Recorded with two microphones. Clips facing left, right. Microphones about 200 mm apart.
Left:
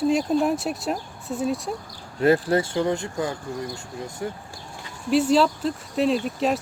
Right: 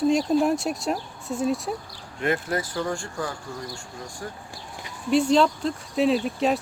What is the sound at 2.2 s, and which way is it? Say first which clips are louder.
Speech: left 7 dB; 30° left (ahead or behind).